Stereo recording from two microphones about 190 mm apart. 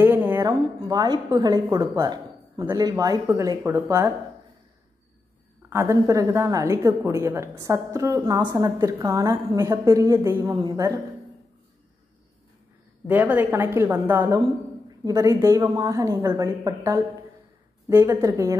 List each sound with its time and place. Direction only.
0.0 s a woman's voice: 10° right (ahead or behind)
5.7 s a woman's voice: 15° right (ahead or behind)
13.0 s a woman's voice: 10° right (ahead or behind)